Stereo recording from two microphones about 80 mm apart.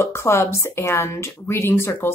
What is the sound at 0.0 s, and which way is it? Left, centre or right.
Speech, left.